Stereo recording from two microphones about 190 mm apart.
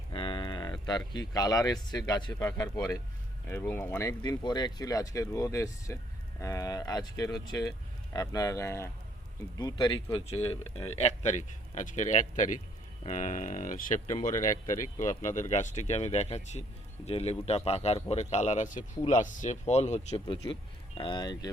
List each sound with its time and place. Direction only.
0.1 s speech: 25° left (ahead or behind)
6.4 s cattle: 15° left (ahead or behind)
8.1 s speech: 20° left (ahead or behind); by 14.3 s 40° left (ahead or behind)
14.7 s speech: 15° left (ahead or behind)
15.1 s speech: 40° left (ahead or behind); by 21.5 s 20° left (ahead or behind)